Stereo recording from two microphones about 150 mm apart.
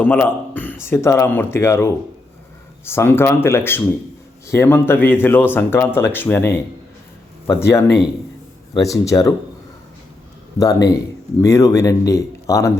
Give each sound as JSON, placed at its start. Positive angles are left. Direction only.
{"t": 0.0, "sound": "speech", "side_deg": 10}
{"t": 7.6, "sound": "speech", "side_deg": 20}
{"t": 10.6, "sound": "speech", "side_deg": 25}